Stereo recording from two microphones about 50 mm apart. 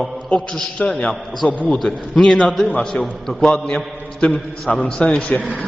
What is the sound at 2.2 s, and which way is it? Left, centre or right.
Speech, centre.